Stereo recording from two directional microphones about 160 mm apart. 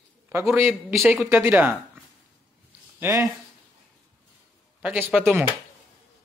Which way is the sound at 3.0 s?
20° right (ahead or behind).